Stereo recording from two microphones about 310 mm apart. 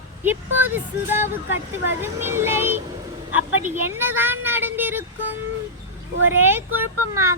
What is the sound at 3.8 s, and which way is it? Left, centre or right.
Speech, centre.